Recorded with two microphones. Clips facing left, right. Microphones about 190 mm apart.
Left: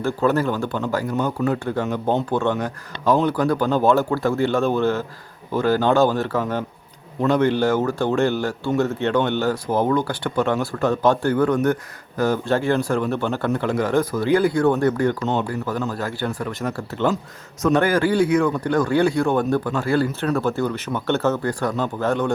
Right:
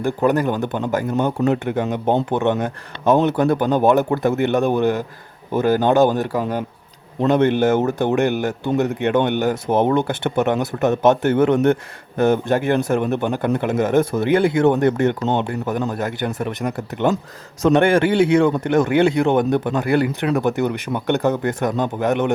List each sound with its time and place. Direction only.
0.0 s speech: 15° right (ahead or behind)